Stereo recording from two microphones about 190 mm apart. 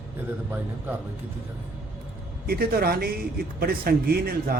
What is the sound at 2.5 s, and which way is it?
Speech, 55° right (ahead or behind).